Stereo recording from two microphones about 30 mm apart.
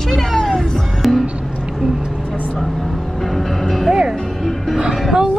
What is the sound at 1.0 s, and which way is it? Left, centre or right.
Music, centre.